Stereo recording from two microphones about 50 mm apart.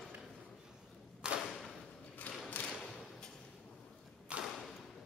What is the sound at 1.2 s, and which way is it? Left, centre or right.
Thump, centre.